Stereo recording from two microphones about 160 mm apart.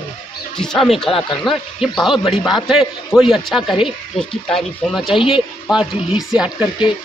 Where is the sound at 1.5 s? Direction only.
30° left (ahead or behind).